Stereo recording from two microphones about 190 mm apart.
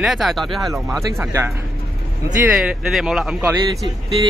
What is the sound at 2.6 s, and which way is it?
Speech, 5° right (ahead or behind).